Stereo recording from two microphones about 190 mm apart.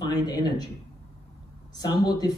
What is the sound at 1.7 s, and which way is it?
Speech, 20° left (ahead or behind).